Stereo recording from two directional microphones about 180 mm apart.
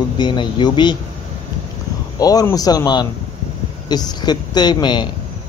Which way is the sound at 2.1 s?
20° left (ahead or behind).